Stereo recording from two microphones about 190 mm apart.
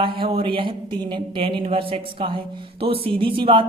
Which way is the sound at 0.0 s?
30° right (ahead or behind).